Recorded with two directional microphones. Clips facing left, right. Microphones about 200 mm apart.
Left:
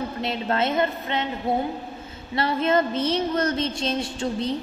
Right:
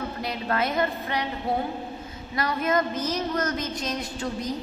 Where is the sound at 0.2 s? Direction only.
25° left (ahead or behind).